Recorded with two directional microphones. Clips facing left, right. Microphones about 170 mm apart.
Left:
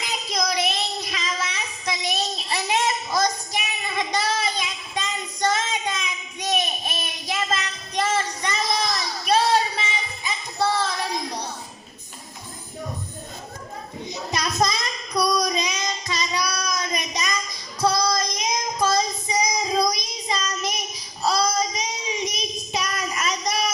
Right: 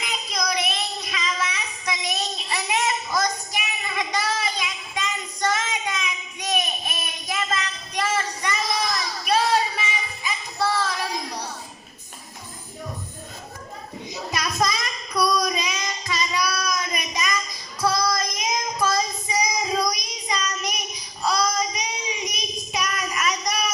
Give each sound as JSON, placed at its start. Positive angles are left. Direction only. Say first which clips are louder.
{"t": 1.1, "sound": "child singing", "louder": "right 1 dB", "side_deg": 30}
{"t": 2.5, "sound": "a sound", "louder": "left 1 dB", "side_deg": 30}
{"t": 6.4, "sound": "child singing", "louder": "left 1 dB", "side_deg": 25}
{"t": 14.3, "sound": "child singing", "louder": "left 1 dB", "side_deg": 25}